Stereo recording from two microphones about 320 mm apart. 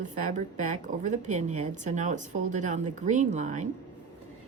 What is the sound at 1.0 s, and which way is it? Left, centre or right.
Speech, right.